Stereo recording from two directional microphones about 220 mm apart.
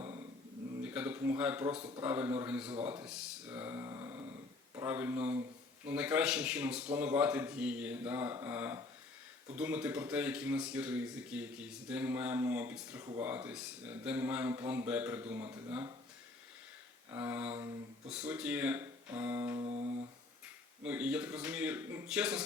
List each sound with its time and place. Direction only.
0.8 s speech: 5° right (ahead or behind)
3.1 s a sound: 5° right (ahead or behind)
4.7 s speech: 10° right (ahead or behind)
17.1 s speech: 10° right (ahead or behind)
19.5 s guitar: 25° right (ahead or behind)
20.8 s speech: 5° right (ahead or behind)